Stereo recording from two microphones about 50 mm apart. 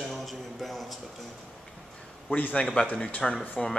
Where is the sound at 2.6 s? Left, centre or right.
Left.